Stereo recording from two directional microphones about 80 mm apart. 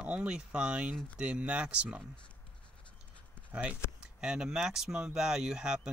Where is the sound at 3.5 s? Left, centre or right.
Centre.